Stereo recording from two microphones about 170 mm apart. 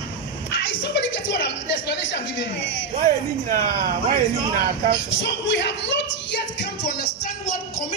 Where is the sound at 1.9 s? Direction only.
90° left.